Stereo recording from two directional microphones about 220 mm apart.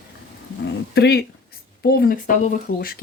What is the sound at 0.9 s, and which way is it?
Speech, 50° left (ahead or behind).